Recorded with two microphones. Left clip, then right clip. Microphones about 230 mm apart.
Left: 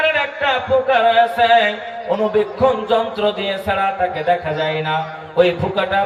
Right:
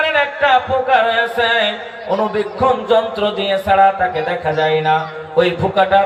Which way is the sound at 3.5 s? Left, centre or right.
Centre.